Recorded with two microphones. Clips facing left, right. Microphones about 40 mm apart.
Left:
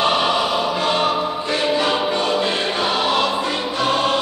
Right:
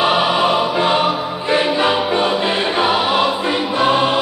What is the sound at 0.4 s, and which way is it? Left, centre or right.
Music, right.